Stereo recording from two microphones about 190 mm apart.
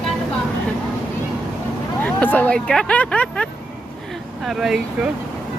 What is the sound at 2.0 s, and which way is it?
Speech, 10° left (ahead or behind).